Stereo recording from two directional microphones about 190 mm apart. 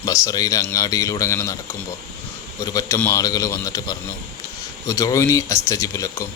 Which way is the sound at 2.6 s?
15° left (ahead or behind).